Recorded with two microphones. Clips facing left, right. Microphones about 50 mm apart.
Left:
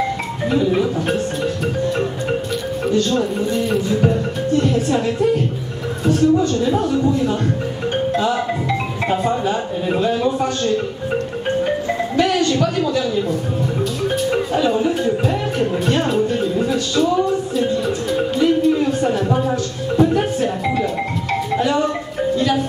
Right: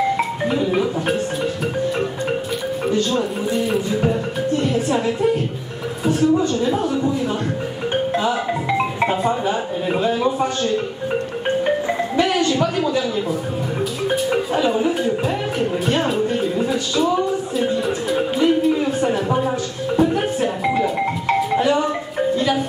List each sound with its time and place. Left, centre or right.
0.5 s marimba: centre
2.8 s music: centre
6.0 s speech: centre
7.9 s marimba: centre
9.2 s a man's voice: centre
12.2 s a man's voice: centre
17.6 s music: centre
22.3 s marimba: centre